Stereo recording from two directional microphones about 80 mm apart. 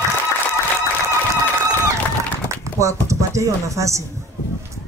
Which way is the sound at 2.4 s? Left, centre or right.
Right.